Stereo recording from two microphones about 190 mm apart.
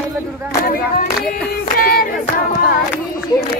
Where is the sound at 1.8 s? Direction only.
50° left (ahead or behind).